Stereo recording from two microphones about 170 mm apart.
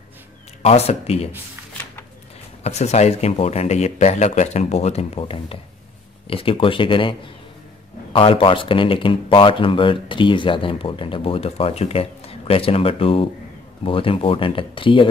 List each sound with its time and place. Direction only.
0.6 s speech: 35° left (ahead or behind)
2.6 s speech: 40° left (ahead or behind)